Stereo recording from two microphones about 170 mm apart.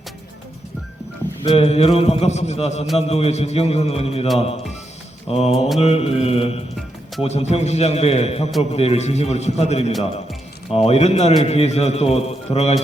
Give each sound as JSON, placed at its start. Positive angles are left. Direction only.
{"t": 1.5, "sound": "a man's voice", "side_deg": 35}
{"t": 5.3, "sound": "a man's voice", "side_deg": 35}